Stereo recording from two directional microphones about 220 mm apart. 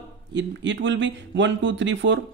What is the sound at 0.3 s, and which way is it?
Speech, 55° right (ahead or behind).